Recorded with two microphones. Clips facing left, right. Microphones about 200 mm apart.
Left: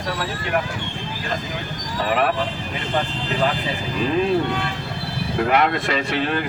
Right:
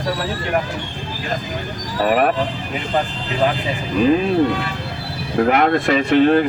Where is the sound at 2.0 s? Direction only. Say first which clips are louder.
Right 4 dB; 45° right (ahead or behind).